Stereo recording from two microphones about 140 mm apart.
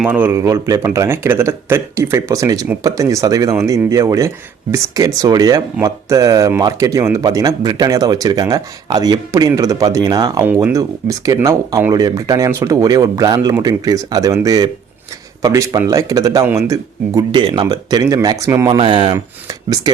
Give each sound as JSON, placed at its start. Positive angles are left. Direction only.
{"t": 0.0, "sound": "speech", "side_deg": -15}
{"t": 10.4, "sound": "speech", "side_deg": -15}
{"t": 17.2, "sound": "speech", "side_deg": -30}
{"t": 18.8, "sound": "speech", "side_deg": -40}
{"t": 19.1, "sound": "speech", "side_deg": -25}